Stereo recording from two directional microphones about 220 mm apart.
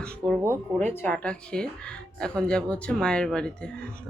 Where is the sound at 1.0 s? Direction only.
5° left (ahead or behind).